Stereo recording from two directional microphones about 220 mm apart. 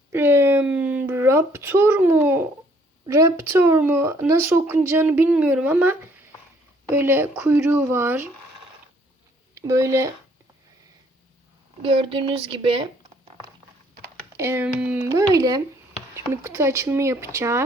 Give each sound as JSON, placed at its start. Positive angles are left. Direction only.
{"t": 0.1, "sound": "a sound", "side_deg": -10}
{"t": 3.1, "sound": "speech", "side_deg": -10}
{"t": 9.6, "sound": "speech", "side_deg": -15}
{"t": 11.8, "sound": "speech", "side_deg": -25}
{"t": 14.3, "sound": "speech", "side_deg": -10}